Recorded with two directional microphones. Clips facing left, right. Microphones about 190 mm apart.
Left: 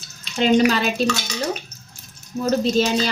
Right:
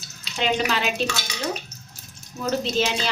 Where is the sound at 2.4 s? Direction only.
40° left (ahead or behind).